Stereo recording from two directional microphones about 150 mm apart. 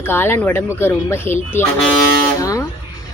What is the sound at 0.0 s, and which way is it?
A woman's voice, 15° left (ahead or behind).